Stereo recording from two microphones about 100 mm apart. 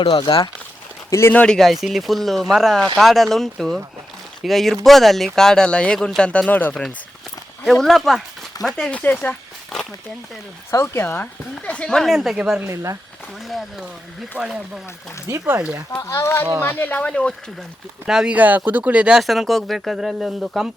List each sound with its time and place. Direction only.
0.3 s speech: 60° left (ahead or behind)
1.1 s speech: 25° left (ahead or behind)
1.4 s speech: 5° left (ahead or behind)
7.6 s a woman's voice: centre (ahead or behind); by 9.4 s 15° left (ahead or behind)
9.7 s a sound: 5° left (ahead or behind)
10.7 s speech: 30° left (ahead or behind)
11.1 s a woman's voice: 10° left (ahead or behind); by 12.5 s 5° right (ahead or behind)
12.6 s speech: 30° right (ahead or behind)
13.4 s speech: centre (ahead or behind)
15.3 s speech: 30° right (ahead or behind)
16.0 s a woman's voice: 35° left (ahead or behind); by 17.7 s 10° left (ahead or behind)
18.0 s speech: 10° right (ahead or behind)
19.2 s speech: centre (ahead or behind)